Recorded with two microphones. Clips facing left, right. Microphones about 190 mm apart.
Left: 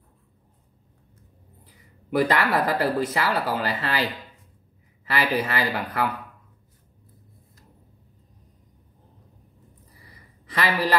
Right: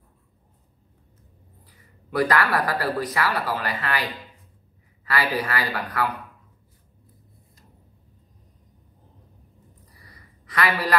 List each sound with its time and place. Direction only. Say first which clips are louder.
2.0 s speech: even; 25° left (ahead or behind)
5.0 s speech: left 1 dB; 25° left (ahead or behind)
10.4 s a man's voice: even; 25° left (ahead or behind)